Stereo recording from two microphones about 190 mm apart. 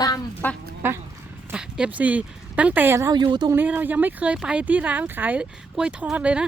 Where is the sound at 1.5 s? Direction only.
5° right (ahead or behind); by 3.5 s 25° right (ahead or behind).